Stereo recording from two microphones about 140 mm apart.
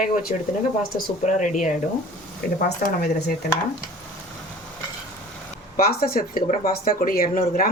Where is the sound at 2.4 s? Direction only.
90° left.